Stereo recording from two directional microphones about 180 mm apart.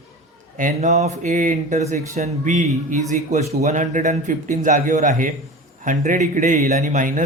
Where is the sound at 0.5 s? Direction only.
45° right (ahead or behind).